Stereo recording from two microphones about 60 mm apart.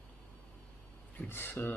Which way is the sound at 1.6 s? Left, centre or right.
Left.